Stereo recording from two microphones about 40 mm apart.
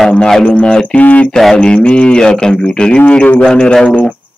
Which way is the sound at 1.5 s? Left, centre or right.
Left.